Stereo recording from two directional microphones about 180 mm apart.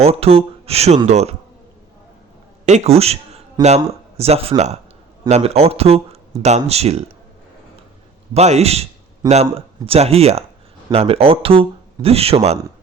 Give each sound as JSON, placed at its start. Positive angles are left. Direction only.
{"t": 0.0, "sound": "speech", "side_deg": -35}
{"t": 2.6, "sound": "a man's voice", "side_deg": -35}
{"t": 8.3, "sound": "speech", "side_deg": -35}